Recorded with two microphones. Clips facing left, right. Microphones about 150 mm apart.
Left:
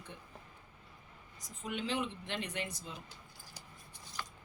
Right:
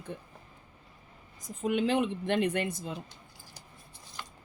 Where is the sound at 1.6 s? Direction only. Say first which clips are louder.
Right 10 dB; 50° right (ahead or behind).